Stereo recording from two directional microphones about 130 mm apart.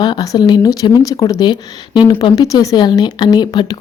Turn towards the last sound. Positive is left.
turn(degrees=35)  # may be behind; listen again after turning